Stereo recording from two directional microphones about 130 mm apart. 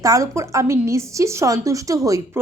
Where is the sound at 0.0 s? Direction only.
25° right (ahead or behind).